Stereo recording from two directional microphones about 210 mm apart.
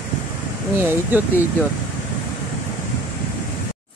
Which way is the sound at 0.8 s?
10° right (ahead or behind).